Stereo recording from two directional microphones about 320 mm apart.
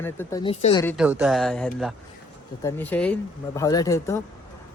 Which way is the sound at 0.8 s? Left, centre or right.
Centre.